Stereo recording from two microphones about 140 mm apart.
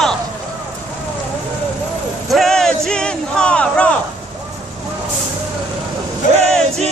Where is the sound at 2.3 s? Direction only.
Centre (ahead or behind).